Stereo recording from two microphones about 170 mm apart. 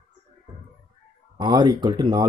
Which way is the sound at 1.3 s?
25° right (ahead or behind).